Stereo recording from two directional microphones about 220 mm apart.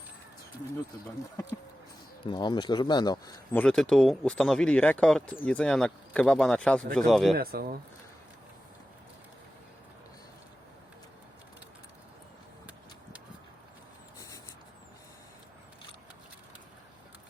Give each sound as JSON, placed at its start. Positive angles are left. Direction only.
{"t": 2.2, "sound": "speech", "side_deg": 20}
{"t": 3.5, "sound": "speech", "side_deg": 5}
{"t": 7.3, "sound": "speech", "side_deg": -45}